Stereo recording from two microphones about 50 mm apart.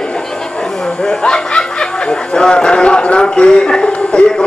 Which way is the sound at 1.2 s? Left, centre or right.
Centre.